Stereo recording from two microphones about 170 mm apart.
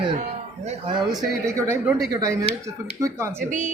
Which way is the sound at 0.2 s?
40° right (ahead or behind).